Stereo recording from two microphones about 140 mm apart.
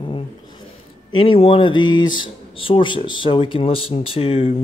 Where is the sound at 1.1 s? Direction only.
40° left (ahead or behind).